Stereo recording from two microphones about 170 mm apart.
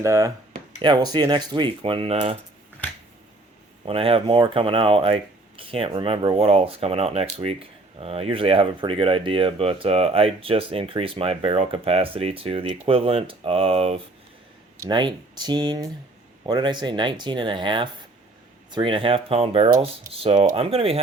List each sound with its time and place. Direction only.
0.0 s speech: 20° right (ahead or behind); by 2.3 s 35° right (ahead or behind)
3.8 s speech: 35° right (ahead or behind)